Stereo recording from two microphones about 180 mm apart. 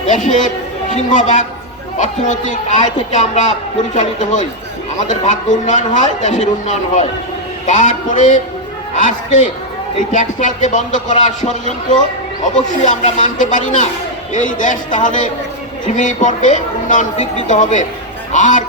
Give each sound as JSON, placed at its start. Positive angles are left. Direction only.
{"t": 0.1, "sound": "a man's voice", "side_deg": 45}
{"t": 10.1, "sound": "a man's voice", "side_deg": 45}